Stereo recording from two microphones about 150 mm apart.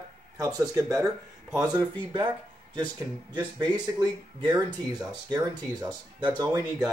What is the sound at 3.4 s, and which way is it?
Speech, 30° right (ahead or behind).